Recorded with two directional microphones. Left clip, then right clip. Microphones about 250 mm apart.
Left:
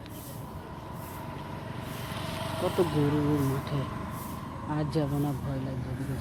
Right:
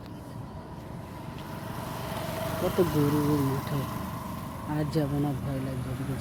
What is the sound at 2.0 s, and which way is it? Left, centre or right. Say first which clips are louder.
Vehicle: right 2 dB; right.